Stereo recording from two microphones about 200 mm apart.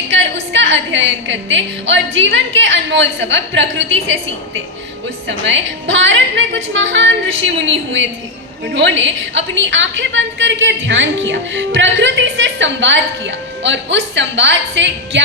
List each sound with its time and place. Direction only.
0.1 s a woman's voice: 65° right (ahead or behind)
5.9 s a woman's voice: 65° right (ahead or behind)